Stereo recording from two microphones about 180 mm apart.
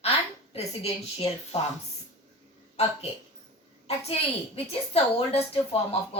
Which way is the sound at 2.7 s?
35° left (ahead or behind).